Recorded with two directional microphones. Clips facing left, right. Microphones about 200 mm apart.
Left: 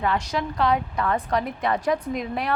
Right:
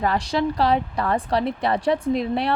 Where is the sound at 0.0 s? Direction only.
35° right (ahead or behind).